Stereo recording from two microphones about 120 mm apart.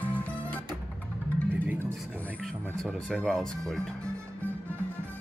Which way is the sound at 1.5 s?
15° right (ahead or behind).